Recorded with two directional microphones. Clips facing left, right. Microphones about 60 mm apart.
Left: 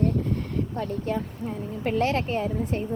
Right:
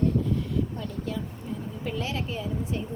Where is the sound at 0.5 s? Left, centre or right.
Left.